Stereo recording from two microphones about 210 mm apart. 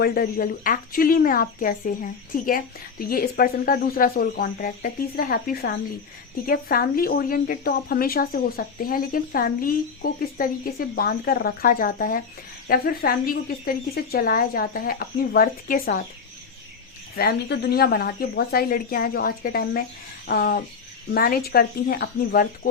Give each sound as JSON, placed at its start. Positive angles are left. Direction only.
{"t": 0.0, "sound": "a woman's voice", "side_deg": 45}
{"t": 17.2, "sound": "a woman's voice", "side_deg": 50}